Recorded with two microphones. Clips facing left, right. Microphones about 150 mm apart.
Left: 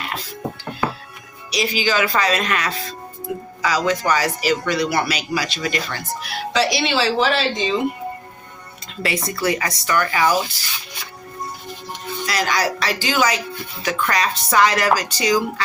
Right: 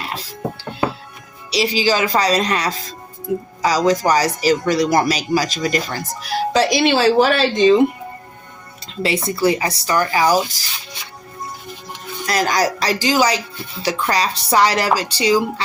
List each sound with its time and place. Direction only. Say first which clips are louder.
1.5 s speech: right 4 dB; 30° right (ahead or behind); by 7.8 s 55° right (ahead or behind)
9.0 s speech: right 5 dB; 25° right (ahead or behind)
12.2 s speech: right 3 dB; 45° right (ahead or behind); by 15.6 s 30° right (ahead or behind)